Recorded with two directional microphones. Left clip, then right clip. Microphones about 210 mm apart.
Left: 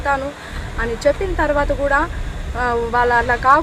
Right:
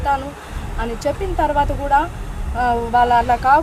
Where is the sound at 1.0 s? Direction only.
Centre (ahead or behind).